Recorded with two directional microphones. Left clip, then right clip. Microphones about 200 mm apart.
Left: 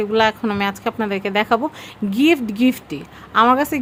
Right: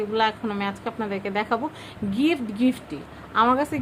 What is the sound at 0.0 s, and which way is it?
A woman's voice, 40° left (ahead or behind).